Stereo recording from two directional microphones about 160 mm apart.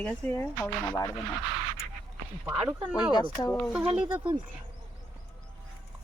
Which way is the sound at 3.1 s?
25° left (ahead or behind).